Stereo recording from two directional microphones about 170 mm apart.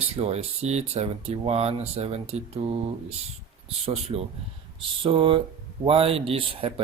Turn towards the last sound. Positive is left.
turn(degrees=-30)  # may be behind; listen again after turning